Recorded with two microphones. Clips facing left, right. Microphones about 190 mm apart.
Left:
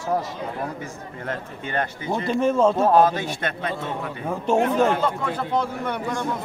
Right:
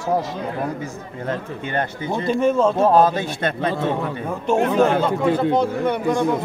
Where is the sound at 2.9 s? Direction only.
30° right (ahead or behind).